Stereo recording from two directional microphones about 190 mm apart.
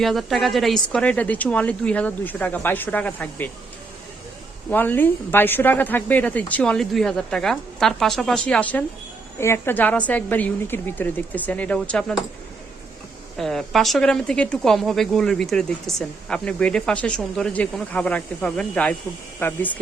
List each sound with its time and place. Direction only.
0.0 s speech: centre (ahead or behind)
4.7 s speech: 10° left (ahead or behind)
13.3 s speech: centre (ahead or behind)